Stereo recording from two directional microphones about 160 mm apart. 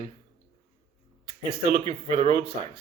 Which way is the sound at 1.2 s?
40° right (ahead or behind).